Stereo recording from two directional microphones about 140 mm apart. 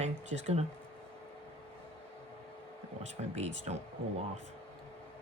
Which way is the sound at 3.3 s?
50° right (ahead or behind).